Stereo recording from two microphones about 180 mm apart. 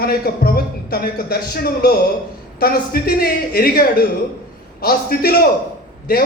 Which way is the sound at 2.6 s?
55° left (ahead or behind).